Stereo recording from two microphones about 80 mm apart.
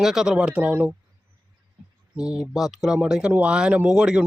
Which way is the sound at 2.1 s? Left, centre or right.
Centre.